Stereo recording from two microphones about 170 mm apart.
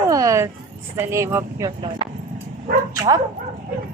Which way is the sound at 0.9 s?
15° right (ahead or behind).